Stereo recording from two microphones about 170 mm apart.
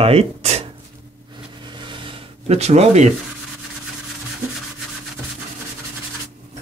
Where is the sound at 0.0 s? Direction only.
35° right (ahead or behind).